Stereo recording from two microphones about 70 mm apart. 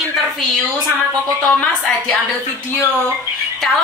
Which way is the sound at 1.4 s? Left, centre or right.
Centre.